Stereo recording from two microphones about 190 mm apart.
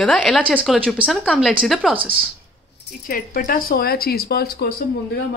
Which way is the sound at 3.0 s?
45° left (ahead or behind).